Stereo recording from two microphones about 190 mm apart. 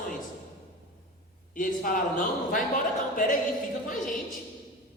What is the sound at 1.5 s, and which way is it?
Speech, 45° left (ahead or behind).